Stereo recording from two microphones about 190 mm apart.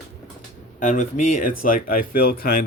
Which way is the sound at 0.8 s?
40° left (ahead or behind).